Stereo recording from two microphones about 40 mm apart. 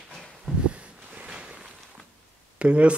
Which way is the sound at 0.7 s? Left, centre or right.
Right.